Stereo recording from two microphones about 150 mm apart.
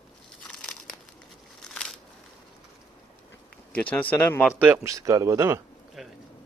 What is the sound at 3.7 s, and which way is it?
Speech, 10° left (ahead or behind).